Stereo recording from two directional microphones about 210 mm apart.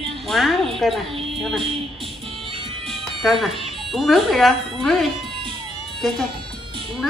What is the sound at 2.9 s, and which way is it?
Speech, centre (ahead or behind).